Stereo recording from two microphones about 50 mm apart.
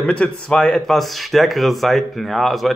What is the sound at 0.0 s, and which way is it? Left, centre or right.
Speech, left.